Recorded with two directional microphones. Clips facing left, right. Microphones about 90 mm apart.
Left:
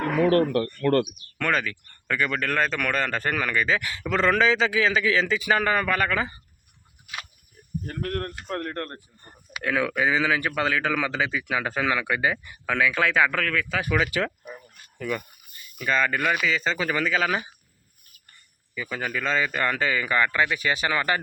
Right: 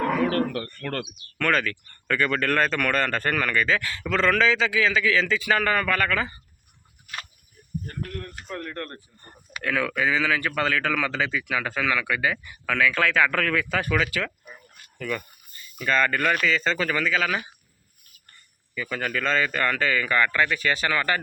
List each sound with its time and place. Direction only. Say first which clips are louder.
1.4 s speech: right 1 dB; 10° left (ahead or behind)
7.9 s speech: left 5 dB; 70° left (ahead or behind); by 9.0 s 35° left (ahead or behind)
9.2 s speech: left 1 dB; 15° left (ahead or behind)
13.3 s speech: right 2 dB; 5° right (ahead or behind)
13.9 s speech: left 4 dB; 15° left (ahead or behind)
15.8 s speech: right 1 dB; 5° left (ahead or behind); by 17.5 s 25° left (ahead or behind)
18.7 s speech: right 1 dB; 10° left (ahead or behind)